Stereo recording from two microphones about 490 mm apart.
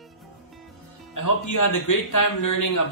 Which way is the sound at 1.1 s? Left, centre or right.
Left.